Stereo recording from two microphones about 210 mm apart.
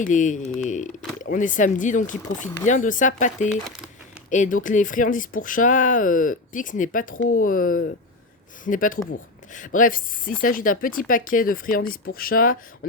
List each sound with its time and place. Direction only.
0.0 s speech: 35° left (ahead or behind)